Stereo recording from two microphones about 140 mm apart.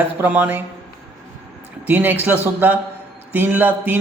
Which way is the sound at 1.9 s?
15° right (ahead or behind).